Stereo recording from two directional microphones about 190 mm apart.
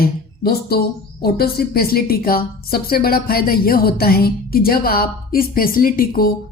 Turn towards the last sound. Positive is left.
turn(degrees=50)  # may be behind; listen again after turning